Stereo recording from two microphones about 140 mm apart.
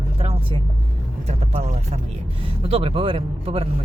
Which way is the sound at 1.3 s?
55° right (ahead or behind).